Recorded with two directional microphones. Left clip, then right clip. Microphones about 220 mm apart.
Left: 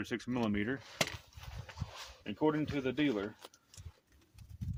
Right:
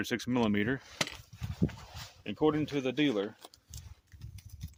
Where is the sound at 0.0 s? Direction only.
50° right (ahead or behind).